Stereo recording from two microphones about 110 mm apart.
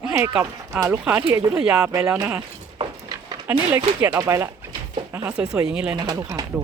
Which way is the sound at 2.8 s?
35° right (ahead or behind).